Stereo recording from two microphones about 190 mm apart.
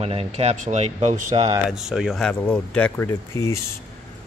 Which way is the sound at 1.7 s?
Centre (ahead or behind).